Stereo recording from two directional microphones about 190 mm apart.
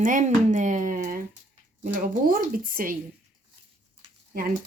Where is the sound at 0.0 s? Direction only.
40° right (ahead or behind).